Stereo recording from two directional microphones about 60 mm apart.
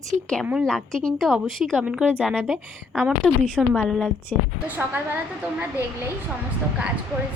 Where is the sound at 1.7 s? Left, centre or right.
Right.